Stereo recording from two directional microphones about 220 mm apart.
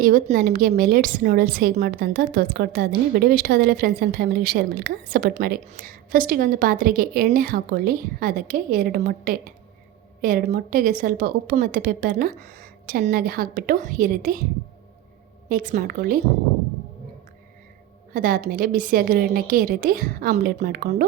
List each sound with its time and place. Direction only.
0.0 s a woman's voice: 40° right (ahead or behind)
15.4 s a woman's voice: 40° right (ahead or behind)
18.1 s a woman's voice: 40° right (ahead or behind)